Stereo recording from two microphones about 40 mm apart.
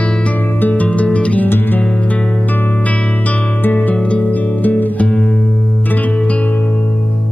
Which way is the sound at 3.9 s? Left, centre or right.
Left.